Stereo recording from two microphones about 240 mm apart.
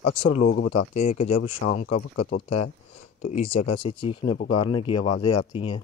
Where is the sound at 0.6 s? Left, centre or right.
Left.